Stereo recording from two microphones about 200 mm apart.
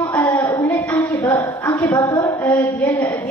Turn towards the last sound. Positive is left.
turn(degrees=10)  # may be behind; listen again after turning